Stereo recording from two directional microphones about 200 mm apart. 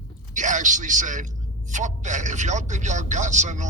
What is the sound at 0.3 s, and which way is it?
A man's voice, 40° right (ahead or behind).